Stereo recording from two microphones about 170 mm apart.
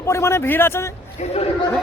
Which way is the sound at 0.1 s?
15° left (ahead or behind).